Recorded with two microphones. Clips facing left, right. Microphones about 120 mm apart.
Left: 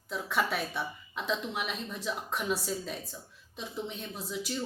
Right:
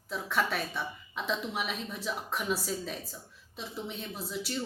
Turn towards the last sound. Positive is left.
turn(degrees=0)  # may be behind; listen again after turning